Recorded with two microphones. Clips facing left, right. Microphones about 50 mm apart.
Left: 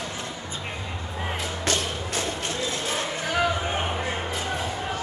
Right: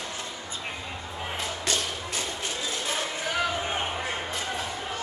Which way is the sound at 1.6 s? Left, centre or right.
Left.